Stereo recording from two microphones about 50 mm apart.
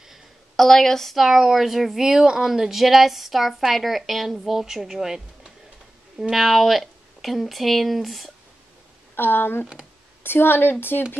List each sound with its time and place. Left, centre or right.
0.6 s a woman's voice: centre
9.1 s a woman's voice: left